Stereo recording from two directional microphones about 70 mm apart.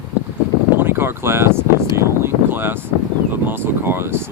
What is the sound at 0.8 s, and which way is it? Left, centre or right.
Speech, right.